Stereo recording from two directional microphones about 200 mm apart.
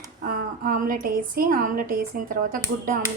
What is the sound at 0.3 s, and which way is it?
A woman's voice, 45° right (ahead or behind).